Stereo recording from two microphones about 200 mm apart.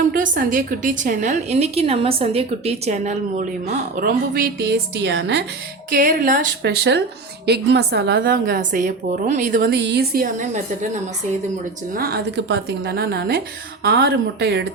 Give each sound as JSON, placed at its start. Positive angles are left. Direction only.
{"t": 0.1, "sound": "a woman's voice", "side_deg": -45}
{"t": 5.9, "sound": "a woman's voice", "side_deg": -40}
{"t": 11.9, "sound": "a woman's voice", "side_deg": -50}